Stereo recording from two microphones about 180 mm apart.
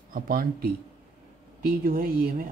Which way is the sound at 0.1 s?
55° right (ahead or behind).